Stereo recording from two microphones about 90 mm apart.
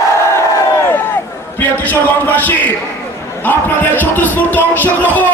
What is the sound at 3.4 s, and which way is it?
Music, 20° left (ahead or behind).